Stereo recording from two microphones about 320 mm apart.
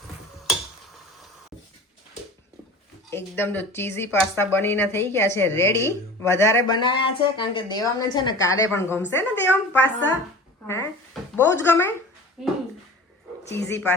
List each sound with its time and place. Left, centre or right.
3.1 s speech: centre